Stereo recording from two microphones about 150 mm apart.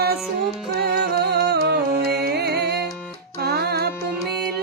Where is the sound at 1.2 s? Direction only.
90° right.